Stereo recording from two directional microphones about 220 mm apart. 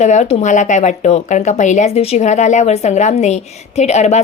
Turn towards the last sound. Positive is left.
turn(degrees=30)  # may be behind; listen again after turning